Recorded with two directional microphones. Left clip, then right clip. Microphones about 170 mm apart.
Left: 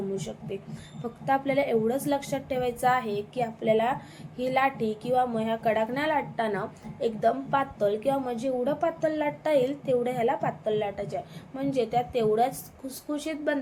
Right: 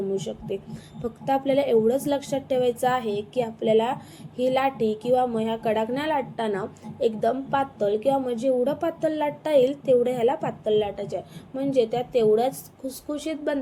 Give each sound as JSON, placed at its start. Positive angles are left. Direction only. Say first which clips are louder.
{"t": 0.2, "sound": "a woman's voice", "louder": "right 5 dB", "side_deg": -15}